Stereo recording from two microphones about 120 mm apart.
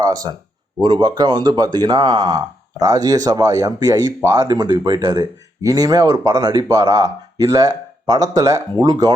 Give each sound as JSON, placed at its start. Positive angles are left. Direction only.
{"t": 0.0, "sound": "speech", "side_deg": -35}